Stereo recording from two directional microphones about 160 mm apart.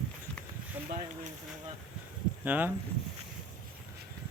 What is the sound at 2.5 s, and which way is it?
Speech, 10° right (ahead or behind).